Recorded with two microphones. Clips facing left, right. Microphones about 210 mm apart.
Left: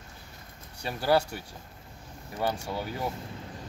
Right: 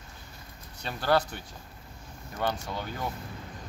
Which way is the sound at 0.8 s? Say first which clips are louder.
Left 1 dB; 5° left (ahead or behind).